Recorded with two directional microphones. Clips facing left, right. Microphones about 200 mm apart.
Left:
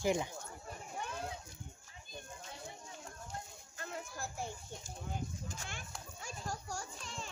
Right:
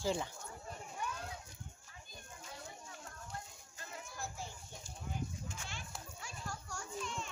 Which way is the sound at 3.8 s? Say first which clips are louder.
Left 3 dB; 60° left (ahead or behind).